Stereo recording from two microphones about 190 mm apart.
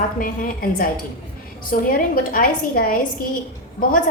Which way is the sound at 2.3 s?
50° left (ahead or behind).